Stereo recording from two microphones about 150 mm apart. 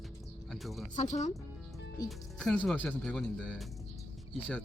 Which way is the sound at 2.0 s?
5° left (ahead or behind).